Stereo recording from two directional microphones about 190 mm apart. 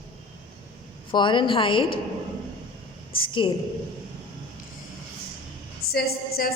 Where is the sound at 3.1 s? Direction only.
25° left (ahead or behind).